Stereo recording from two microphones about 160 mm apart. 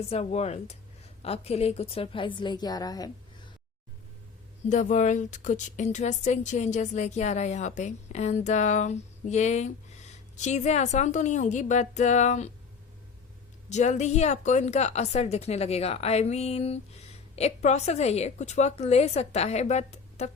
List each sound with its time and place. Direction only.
0.1 s a woman's voice: 40° left (ahead or behind); by 3.1 s 25° left (ahead or behind)
4.7 s speech: 50° left (ahead or behind)
13.7 s speech: 45° left (ahead or behind)